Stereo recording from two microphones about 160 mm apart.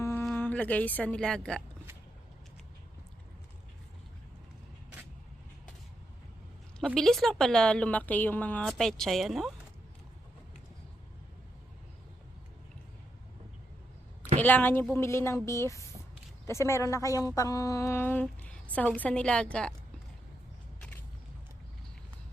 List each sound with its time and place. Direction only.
0.0 s speech: 15° left (ahead or behind)
6.7 s speech: 5° left (ahead or behind)
14.3 s speech: 10° left (ahead or behind)